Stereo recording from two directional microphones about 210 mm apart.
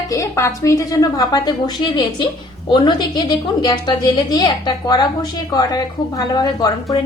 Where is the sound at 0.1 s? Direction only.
15° left (ahead or behind).